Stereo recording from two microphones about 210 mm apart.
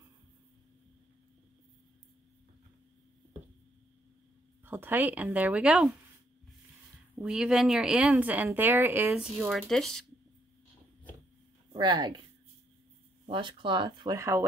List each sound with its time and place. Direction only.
4.6 s speech: 10° right (ahead or behind)
7.2 s speech: 5° right (ahead or behind)
11.7 s speech: 20° right (ahead or behind)
13.3 s speech: 25° right (ahead or behind)